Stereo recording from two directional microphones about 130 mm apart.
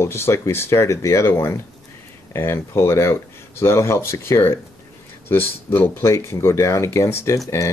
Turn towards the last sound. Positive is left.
turn(degrees=20)  # may be behind; listen again after turning